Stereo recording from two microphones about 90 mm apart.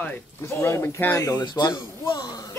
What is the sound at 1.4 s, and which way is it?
Speech, 55° left (ahead or behind).